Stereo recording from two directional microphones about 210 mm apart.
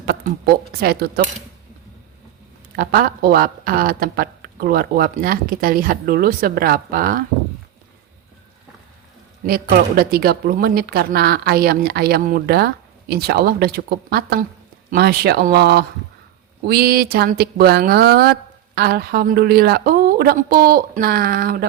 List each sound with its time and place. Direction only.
0.0 s a woman's voice: 45° right (ahead or behind)
2.7 s a woman's voice: 45° right (ahead or behind)
9.5 s a woman's voice: 45° right (ahead or behind)